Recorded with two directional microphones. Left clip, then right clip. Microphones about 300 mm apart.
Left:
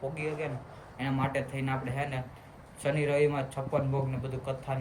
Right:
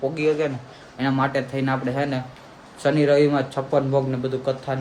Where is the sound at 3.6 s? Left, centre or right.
Right.